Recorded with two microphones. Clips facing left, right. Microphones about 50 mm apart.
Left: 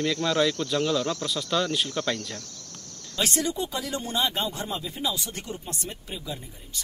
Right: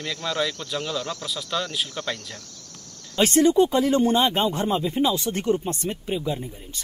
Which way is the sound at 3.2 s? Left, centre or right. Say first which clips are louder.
Right 10 dB; right.